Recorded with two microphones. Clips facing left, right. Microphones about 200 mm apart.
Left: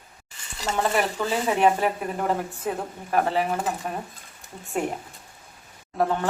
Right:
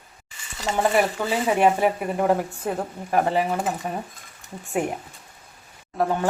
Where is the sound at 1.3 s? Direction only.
10° right (ahead or behind).